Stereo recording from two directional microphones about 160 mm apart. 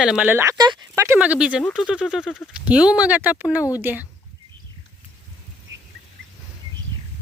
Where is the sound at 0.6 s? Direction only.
25° right (ahead or behind).